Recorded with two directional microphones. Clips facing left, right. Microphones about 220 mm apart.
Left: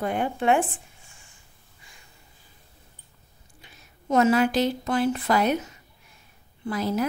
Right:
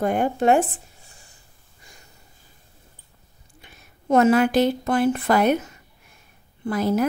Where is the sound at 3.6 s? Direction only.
55° right (ahead or behind).